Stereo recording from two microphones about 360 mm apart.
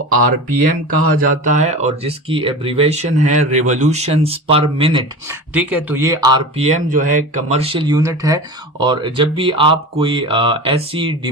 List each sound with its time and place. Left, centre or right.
1.1 s speech: right